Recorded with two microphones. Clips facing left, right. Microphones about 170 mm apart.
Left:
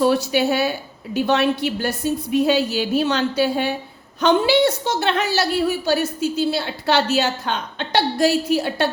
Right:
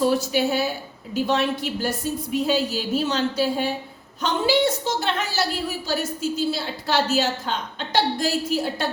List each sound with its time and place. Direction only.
0.0 s a woman's voice: 70° left (ahead or behind)